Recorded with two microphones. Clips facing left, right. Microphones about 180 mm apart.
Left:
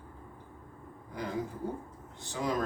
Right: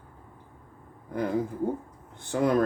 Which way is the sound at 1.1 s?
55° right (ahead or behind).